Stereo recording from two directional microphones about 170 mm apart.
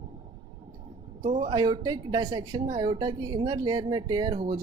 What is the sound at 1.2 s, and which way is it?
A woman's voice, 35° right (ahead or behind).